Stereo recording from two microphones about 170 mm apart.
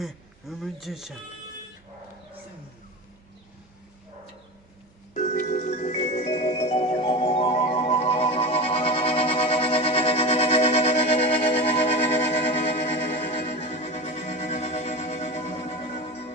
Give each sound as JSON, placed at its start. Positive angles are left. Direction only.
{"t": 0.0, "sound": "speech", "side_deg": 0}
{"t": 5.1, "sound": "marimba", "side_deg": 45}